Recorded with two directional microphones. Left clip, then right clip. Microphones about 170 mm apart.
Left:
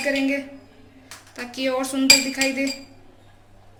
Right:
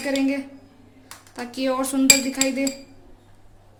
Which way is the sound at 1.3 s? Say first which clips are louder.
Even; 65° right (ahead or behind).